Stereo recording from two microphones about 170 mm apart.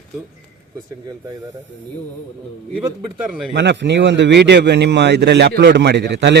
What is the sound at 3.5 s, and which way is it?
A man's voice, 90° right.